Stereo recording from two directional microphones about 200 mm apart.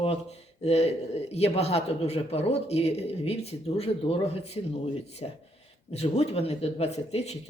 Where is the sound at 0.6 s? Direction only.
30° left (ahead or behind).